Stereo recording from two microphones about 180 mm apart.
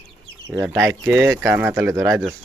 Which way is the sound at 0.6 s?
5° right (ahead or behind).